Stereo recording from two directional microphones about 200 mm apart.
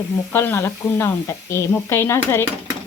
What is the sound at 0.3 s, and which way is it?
Speech, 10° left (ahead or behind).